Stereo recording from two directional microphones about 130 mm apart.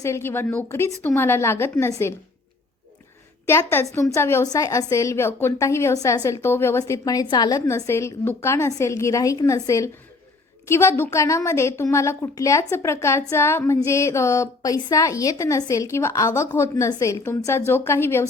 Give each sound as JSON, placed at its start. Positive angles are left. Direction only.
{"t": 0.0, "sound": "a woman's voice", "side_deg": 20}
{"t": 3.4, "sound": "a woman's voice", "side_deg": 20}
{"t": 7.7, "sound": "a woman's voice", "side_deg": 20}